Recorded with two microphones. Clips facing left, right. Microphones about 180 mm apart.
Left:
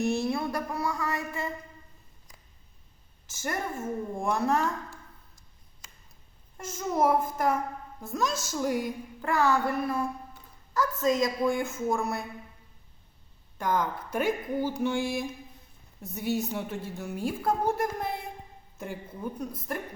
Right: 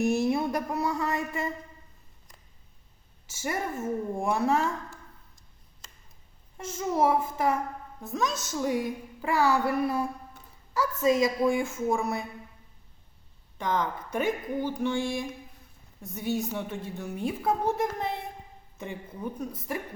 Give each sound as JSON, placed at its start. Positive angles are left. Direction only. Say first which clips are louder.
{"t": 0.0, "sound": "speech", "louder": "right 3 dB", "side_deg": -15}
{"t": 3.3, "sound": "a woman's voice", "louder": "right 1 dB", "side_deg": -5}
{"t": 6.6, "sound": "a woman's voice", "louder": "right 1 dB", "side_deg": 0}
{"t": 8.4, "sound": "a sound", "louder": "right 1 dB", "side_deg": 0}
{"t": 10.8, "sound": "a woman's voice", "louder": "right 2 dB", "side_deg": -5}
{"t": 13.6, "sound": "a woman's voice", "louder": "left 1 dB", "side_deg": 5}
{"t": 14.8, "sound": "a sound", "louder": "even", "side_deg": 5}
{"t": 16.0, "sound": "a woman's voice", "louder": "even", "side_deg": 5}